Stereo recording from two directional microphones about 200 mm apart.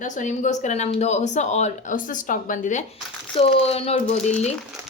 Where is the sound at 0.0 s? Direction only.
40° left (ahead or behind).